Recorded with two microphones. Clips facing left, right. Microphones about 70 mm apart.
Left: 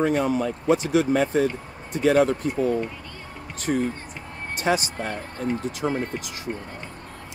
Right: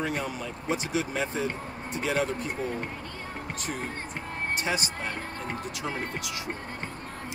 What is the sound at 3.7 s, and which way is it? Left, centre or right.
Speech, left.